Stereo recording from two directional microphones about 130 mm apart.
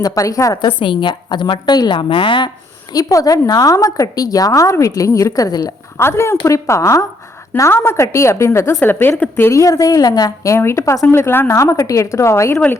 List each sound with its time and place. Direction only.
0.0 s a woman's voice: 25° left (ahead or behind)
2.9 s a woman's voice: 25° left (ahead or behind)